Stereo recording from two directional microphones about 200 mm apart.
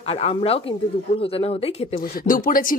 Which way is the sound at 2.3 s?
45° left (ahead or behind).